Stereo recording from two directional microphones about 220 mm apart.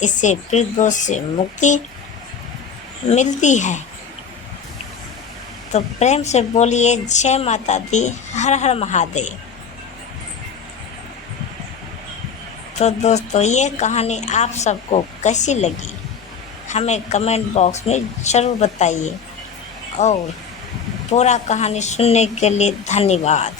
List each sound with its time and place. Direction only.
0.0 s a woman's voice: 35° left (ahead or behind)
3.1 s a woman's voice: 35° left (ahead or behind)
5.7 s a woman's voice: 30° left (ahead or behind)
12.8 s a woman's voice: 30° left (ahead or behind)